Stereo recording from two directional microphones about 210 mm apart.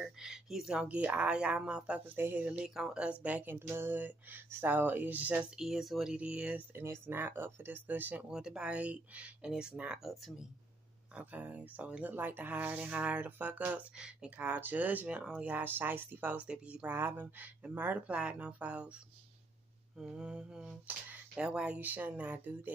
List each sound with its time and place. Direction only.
0.0 s speech: 5° right (ahead or behind)
20.0 s speech: 5° right (ahead or behind)